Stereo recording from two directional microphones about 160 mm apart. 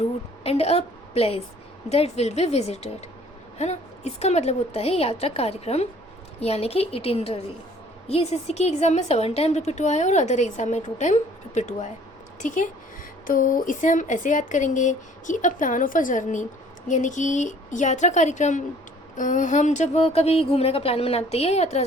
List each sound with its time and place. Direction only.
0.4 s a woman's voice: 40° left (ahead or behind)